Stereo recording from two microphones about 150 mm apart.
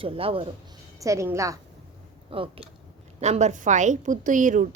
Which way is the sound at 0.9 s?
20° right (ahead or behind).